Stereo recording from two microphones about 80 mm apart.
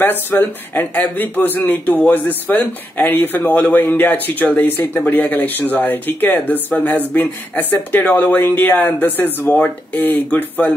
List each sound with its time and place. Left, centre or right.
0.0 s speech: left